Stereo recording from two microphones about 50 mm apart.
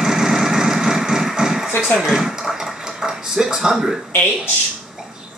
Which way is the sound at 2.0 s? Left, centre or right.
Centre.